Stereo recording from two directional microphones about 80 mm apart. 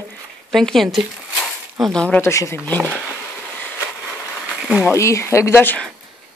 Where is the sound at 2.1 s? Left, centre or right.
Left.